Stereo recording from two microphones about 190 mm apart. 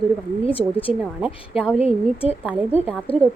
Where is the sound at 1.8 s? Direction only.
30° left (ahead or behind).